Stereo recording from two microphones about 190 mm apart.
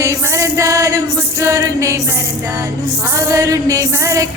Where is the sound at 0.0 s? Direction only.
15° right (ahead or behind).